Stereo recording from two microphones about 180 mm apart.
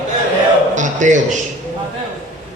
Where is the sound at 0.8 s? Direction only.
45° right (ahead or behind).